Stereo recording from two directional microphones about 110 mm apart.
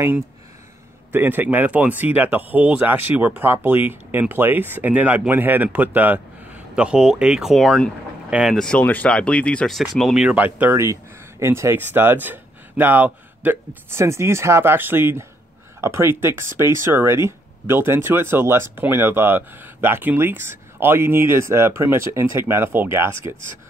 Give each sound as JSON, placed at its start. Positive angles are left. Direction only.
{"t": 1.1, "sound": "speech", "side_deg": -20}
{"t": 8.3, "sound": "speech", "side_deg": -10}
{"t": 8.5, "sound": "speech", "side_deg": 10}
{"t": 10.8, "sound": "speech", "side_deg": -25}